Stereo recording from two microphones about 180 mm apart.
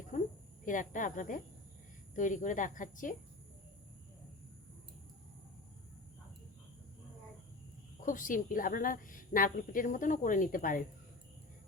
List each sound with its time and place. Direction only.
0.6 s a woman's voice: 45° left (ahead or behind)
8.0 s a woman's voice: 45° left (ahead or behind)